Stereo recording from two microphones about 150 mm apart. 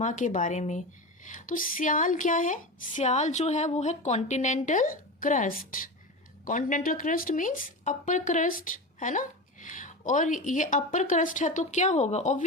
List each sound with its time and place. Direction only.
0.0 s speech: 55° left (ahead or behind)